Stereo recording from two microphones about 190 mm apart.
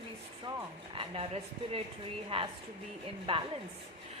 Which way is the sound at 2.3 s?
30° right (ahead or behind).